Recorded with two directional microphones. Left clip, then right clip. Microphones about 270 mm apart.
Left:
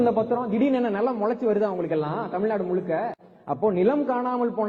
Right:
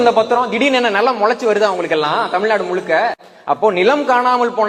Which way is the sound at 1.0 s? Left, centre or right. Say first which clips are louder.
Right 10 dB; centre.